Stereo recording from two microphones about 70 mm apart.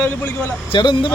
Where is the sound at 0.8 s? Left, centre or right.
Left.